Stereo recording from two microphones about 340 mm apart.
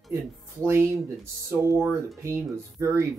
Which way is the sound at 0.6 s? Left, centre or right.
Centre.